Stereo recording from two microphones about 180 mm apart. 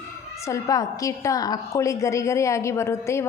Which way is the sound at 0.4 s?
20° left (ahead or behind).